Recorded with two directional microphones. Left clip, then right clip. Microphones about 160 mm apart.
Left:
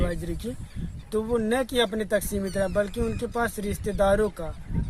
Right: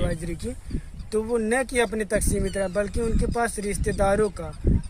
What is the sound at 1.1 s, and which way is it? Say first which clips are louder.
Speech: right 2 dB; 10° right (ahead or behind).